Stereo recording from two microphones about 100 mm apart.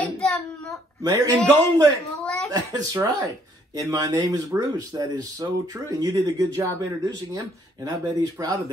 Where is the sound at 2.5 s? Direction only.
40° right (ahead or behind).